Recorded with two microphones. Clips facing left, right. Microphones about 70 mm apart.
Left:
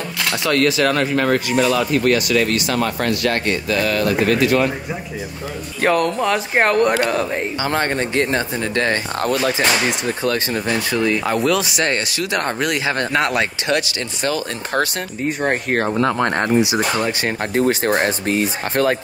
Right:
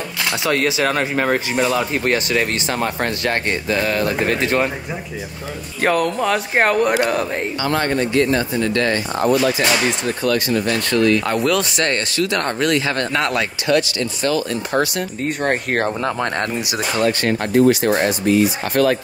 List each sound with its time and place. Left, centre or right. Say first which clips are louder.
0.2 s speech: left 1 dB; centre; by 4.6 s right
5.8 s speech: left 1 dB; centre
7.6 s speech: right 2 dB; left
10.6 s speech: right 2 dB; centre
11.2 s speech: even; centre; by 14.4 s left
15.2 s speech: left 1 dB; centre
16.3 s speech: left 5 dB; left
17.6 s speech: right 3 dB; left